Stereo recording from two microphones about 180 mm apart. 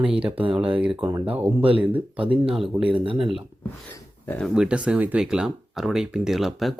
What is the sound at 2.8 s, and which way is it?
Speech, 30° right (ahead or behind).